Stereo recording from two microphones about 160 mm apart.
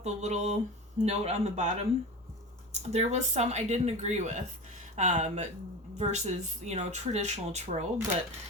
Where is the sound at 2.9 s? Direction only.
45° right (ahead or behind).